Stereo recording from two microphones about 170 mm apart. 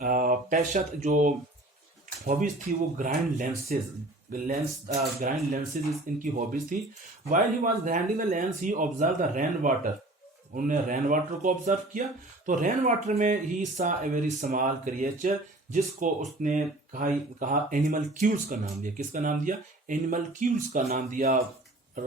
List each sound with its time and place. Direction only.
0.0 s speech: 55° right (ahead or behind)